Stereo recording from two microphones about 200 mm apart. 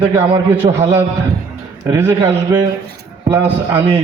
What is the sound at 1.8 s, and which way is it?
A man's voice, 15° right (ahead or behind).